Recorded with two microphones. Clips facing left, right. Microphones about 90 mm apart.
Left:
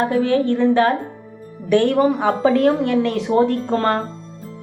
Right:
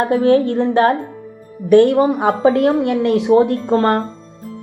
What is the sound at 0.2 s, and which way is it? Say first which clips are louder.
Speech: right 2 dB; 50° right (ahead or behind).